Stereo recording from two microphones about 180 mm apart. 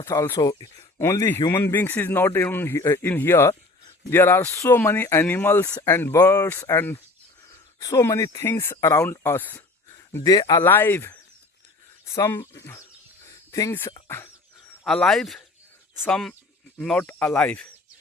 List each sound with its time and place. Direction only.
0.0 s speech: 15° left (ahead or behind)
10.6 s speech: 10° left (ahead or behind)
13.2 s a sound: 15° left (ahead or behind)
14.8 s speech: centre (ahead or behind)